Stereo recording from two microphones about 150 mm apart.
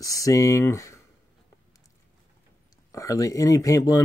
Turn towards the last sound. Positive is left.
turn(degrees=20)  # may be behind; listen again after turning